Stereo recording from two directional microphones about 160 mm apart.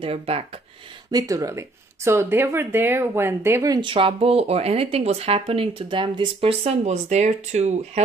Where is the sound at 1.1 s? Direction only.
20° right (ahead or behind).